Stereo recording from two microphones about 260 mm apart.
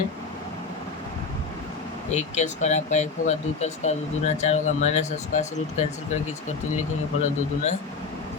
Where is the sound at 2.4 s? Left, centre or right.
Left.